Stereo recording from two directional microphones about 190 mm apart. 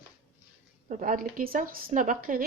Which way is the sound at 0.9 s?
45° right (ahead or behind).